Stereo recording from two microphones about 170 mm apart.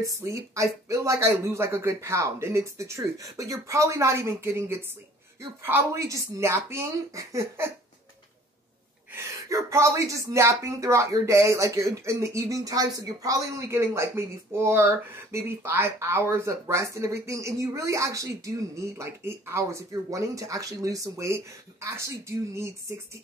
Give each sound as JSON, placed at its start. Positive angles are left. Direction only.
{"t": 0.0, "sound": "speech", "side_deg": -15}
{"t": 9.1, "sound": "speech", "side_deg": -20}